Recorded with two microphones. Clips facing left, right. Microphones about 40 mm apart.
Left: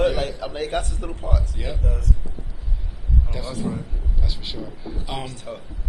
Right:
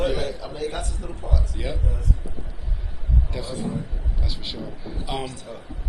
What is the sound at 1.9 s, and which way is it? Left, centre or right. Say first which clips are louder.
Speech: left 2 dB; left.